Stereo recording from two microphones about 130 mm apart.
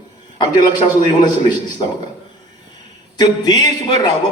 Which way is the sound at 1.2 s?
30° left (ahead or behind).